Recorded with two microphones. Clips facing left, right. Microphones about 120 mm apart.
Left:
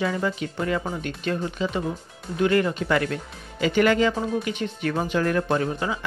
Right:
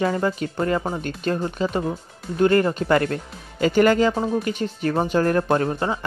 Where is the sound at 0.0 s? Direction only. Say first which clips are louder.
Right 3 dB; 45° right (ahead or behind).